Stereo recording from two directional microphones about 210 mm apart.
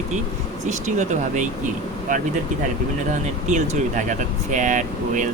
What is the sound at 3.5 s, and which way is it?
Speech, 35° right (ahead or behind).